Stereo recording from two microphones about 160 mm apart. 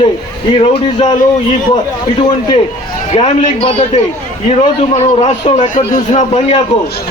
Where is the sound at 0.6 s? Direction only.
30° left (ahead or behind).